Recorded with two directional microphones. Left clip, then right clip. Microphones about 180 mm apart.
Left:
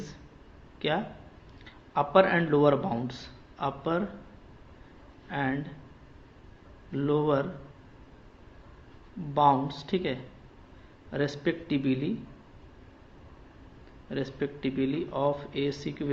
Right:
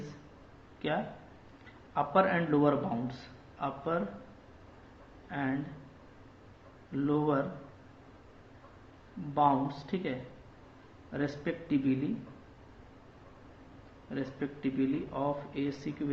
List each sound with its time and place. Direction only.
1.9 s a man's voice: 40° left (ahead or behind)
5.3 s speech: 45° left (ahead or behind)
6.9 s speech: 45° left (ahead or behind)
9.3 s speech: 45° left (ahead or behind)
14.1 s speech: 45° left (ahead or behind)